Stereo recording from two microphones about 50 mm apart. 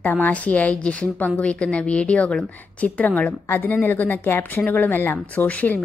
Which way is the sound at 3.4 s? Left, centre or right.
Left.